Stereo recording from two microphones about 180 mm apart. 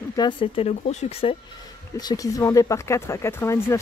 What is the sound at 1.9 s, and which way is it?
Speech, 20° left (ahead or behind).